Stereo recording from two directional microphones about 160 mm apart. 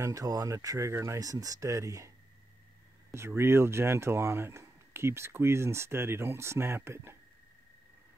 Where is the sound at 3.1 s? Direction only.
15° right (ahead or behind).